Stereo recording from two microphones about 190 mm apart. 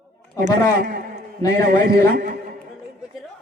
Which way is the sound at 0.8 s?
50° right (ahead or behind).